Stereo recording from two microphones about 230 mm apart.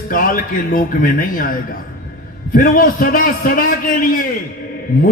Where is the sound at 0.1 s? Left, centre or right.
Left.